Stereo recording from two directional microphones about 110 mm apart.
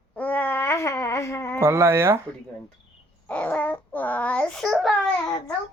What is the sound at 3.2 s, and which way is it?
Baby cry, 15° left (ahead or behind).